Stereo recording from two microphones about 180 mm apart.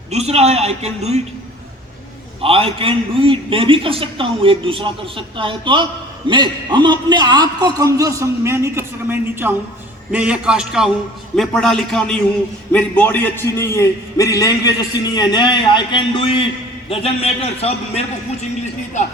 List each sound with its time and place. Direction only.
0.1 s a man's voice: 35° right (ahead or behind)
2.4 s a man's voice: 30° right (ahead or behind); by 18.0 s 35° left (ahead or behind)